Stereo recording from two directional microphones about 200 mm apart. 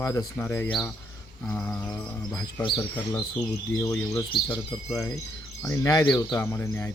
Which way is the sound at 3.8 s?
10° left (ahead or behind).